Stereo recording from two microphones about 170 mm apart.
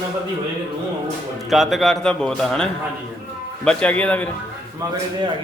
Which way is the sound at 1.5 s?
Centre (ahead or behind).